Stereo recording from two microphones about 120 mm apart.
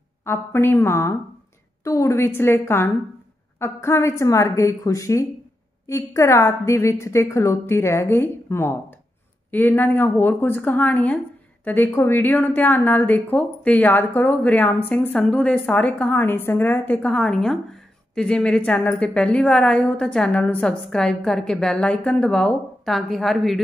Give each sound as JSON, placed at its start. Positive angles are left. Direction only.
{"t": 0.2, "sound": "a woman's voice", "side_deg": 20}